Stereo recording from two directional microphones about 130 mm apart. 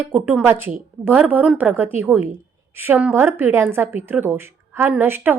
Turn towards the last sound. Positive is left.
turn(degrees=-15)  # may be behind; listen again after turning